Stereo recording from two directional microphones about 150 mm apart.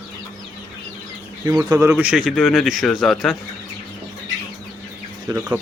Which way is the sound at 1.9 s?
5° right (ahead or behind).